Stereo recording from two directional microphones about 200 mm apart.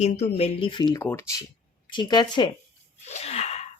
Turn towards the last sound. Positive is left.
turn(degrees=30)  # may be behind; listen again after turning